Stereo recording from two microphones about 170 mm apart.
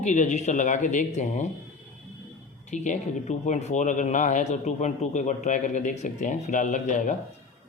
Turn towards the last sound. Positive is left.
turn(degrees=50)  # may be behind; listen again after turning